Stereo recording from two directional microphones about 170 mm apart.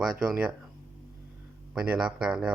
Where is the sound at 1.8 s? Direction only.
5° right (ahead or behind).